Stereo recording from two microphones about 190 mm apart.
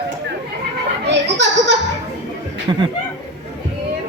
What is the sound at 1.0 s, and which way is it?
Speech, 65° right (ahead or behind).